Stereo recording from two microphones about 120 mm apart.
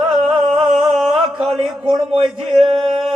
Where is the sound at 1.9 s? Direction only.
55° right (ahead or behind).